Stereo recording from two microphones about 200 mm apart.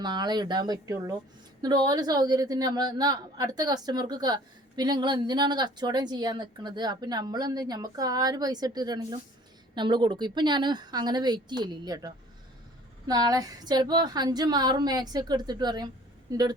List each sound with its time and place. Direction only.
0.0 s a woman's voice: 20° right (ahead or behind)